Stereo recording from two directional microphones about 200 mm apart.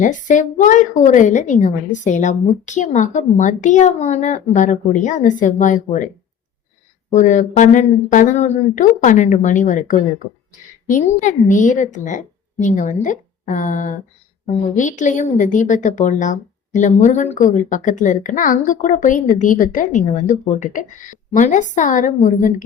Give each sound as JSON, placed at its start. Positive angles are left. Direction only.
{"t": 0.0, "sound": "a woman's voice", "side_deg": 40}
{"t": 7.1, "sound": "a woman's voice", "side_deg": 40}